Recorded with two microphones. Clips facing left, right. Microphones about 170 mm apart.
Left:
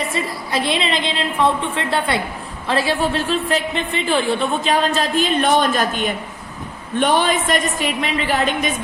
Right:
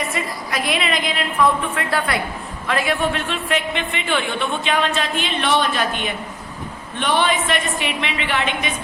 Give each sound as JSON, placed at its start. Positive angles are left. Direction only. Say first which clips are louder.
{"t": 0.1, "sound": "a woman's voice", "louder": "left 3 dB", "side_deg": 30}